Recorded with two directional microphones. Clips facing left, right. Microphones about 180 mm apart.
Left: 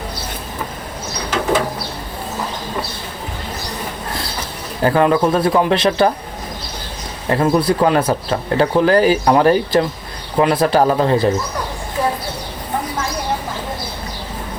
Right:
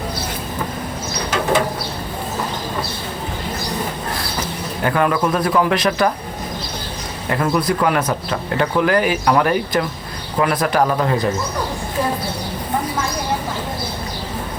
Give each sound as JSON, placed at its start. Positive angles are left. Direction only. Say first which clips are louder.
{"t": 4.8, "sound": "speech", "louder": "left 4 dB", "side_deg": 30}
{"t": 7.3, "sound": "speech", "louder": "left 4 dB", "side_deg": 30}